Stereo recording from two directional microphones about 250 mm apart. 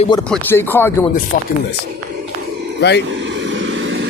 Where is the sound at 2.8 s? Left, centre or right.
Left.